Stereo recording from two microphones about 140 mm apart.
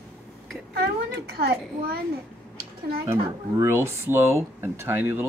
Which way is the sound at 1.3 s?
90° right.